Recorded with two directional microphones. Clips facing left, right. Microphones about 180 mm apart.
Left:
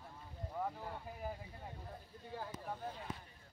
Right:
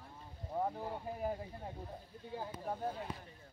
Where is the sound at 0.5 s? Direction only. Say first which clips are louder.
Right 5 dB; 30° right (ahead or behind).